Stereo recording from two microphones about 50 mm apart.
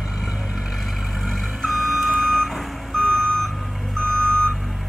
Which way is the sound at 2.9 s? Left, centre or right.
Centre.